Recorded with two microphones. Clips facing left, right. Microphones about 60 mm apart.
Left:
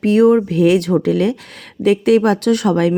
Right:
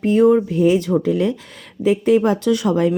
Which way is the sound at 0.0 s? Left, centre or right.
Left.